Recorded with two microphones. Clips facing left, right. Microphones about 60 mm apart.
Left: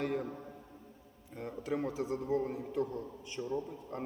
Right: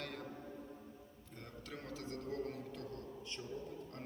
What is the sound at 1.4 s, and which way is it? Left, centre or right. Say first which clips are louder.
A man's voice: left 14 dB; centre.